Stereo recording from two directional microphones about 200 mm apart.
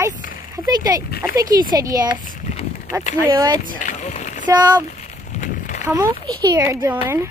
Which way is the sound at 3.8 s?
40° left (ahead or behind).